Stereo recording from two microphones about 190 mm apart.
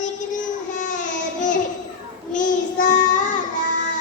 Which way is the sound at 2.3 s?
40° left (ahead or behind).